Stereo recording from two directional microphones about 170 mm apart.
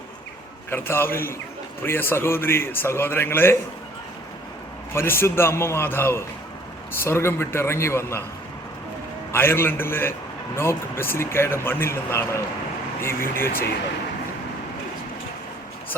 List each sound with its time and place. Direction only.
0.7 s a man's voice: 15° left (ahead or behind)
4.9 s a man's voice: 15° left (ahead or behind)
9.3 s a man's voice: 15° left (ahead or behind)